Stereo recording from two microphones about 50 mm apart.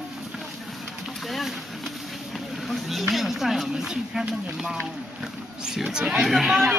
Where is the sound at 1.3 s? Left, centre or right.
Centre.